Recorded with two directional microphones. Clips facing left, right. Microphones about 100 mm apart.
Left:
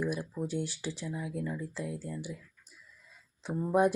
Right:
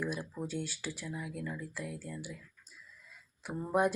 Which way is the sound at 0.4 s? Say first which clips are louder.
Left 4 dB; 20° left (ahead or behind).